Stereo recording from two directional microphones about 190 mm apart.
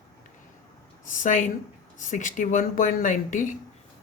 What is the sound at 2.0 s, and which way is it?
Speech, 40° left (ahead or behind).